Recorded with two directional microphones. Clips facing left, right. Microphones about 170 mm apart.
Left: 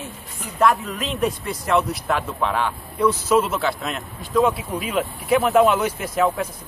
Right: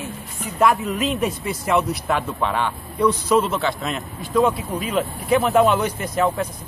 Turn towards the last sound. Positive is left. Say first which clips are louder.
# even
turn(degrees=5)  # may be behind; listen again after turning